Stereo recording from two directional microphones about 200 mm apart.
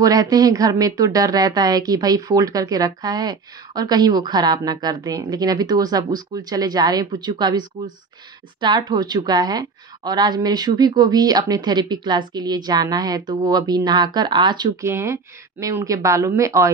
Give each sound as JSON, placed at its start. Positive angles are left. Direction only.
{"t": 0.0, "sound": "a woman's voice", "side_deg": -20}